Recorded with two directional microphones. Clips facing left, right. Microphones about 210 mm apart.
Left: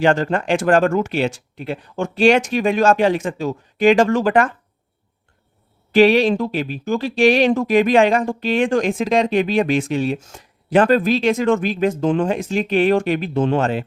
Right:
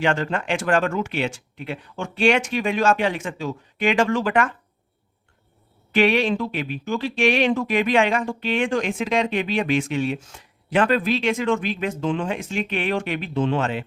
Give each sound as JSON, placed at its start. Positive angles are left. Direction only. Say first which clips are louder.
{"t": 0.0, "sound": "speech", "louder": "left 6 dB", "side_deg": 40}
{"t": 5.9, "sound": "speech", "louder": "left 6 dB", "side_deg": 35}